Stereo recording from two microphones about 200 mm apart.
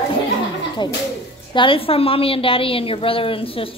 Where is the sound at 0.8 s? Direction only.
20° left (ahead or behind).